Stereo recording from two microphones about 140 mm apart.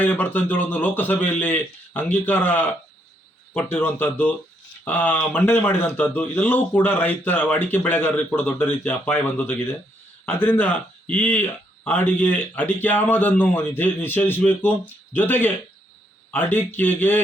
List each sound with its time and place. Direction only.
0.0 s a man's voice: 10° left (ahead or behind)